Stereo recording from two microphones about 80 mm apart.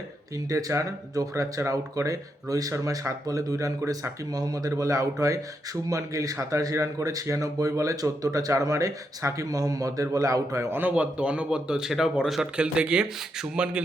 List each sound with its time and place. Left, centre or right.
0.3 s speech: right
4.3 s speech: right
10.8 s a man's voice: centre